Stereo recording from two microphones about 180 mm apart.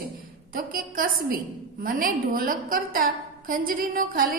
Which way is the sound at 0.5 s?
50° right (ahead or behind).